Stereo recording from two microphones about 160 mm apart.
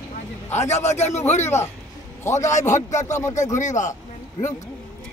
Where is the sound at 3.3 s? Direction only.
50° left (ahead or behind).